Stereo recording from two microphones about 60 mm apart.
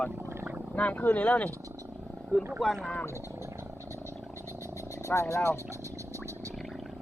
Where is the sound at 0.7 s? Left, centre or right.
Left.